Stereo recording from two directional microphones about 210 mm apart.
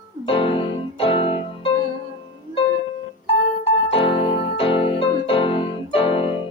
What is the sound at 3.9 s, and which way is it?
Music, 25° left (ahead or behind).